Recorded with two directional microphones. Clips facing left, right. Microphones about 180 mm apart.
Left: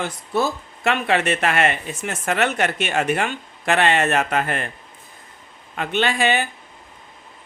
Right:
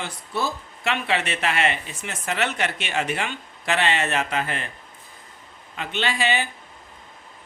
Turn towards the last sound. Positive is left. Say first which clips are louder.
# left 4 dB
turn(degrees=50)  # may be behind; listen again after turning